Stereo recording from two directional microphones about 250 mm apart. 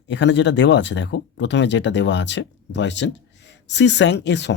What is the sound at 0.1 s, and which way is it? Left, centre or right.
Speech, left.